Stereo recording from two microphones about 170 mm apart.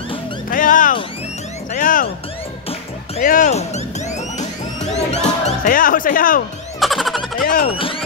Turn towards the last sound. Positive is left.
turn(degrees=30)  # may be behind; listen again after turning